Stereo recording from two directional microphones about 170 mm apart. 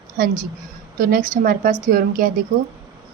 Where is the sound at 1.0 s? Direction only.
55° right (ahead or behind).